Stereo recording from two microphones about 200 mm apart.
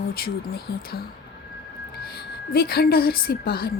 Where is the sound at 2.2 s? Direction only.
50° left (ahead or behind).